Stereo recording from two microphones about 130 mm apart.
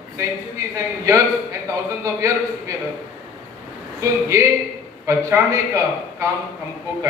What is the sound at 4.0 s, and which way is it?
Speech, 25° right (ahead or behind).